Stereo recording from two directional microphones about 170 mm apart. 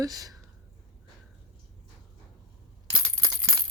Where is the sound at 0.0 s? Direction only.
20° right (ahead or behind).